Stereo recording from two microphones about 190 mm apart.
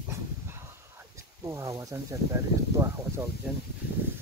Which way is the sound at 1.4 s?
15° right (ahead or behind).